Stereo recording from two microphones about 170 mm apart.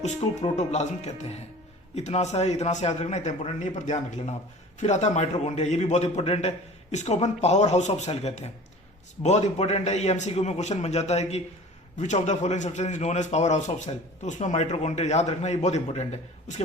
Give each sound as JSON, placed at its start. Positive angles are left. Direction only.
{"t": 0.0, "sound": "a man's voice", "side_deg": 40}